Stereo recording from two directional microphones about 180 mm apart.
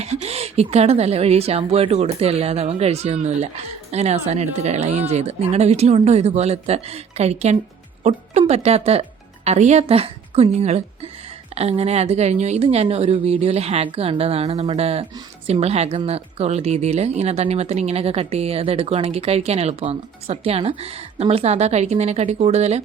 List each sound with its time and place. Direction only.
0.0 s speech: 35° right (ahead or behind)